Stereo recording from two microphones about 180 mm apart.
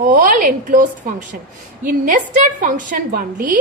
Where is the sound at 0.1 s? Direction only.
45° right (ahead or behind).